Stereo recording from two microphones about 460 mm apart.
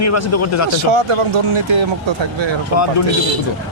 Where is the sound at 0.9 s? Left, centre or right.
Right.